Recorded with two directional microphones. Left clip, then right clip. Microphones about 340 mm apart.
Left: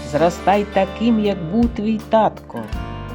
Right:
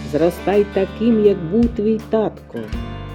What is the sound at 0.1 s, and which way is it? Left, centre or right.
Speech, left.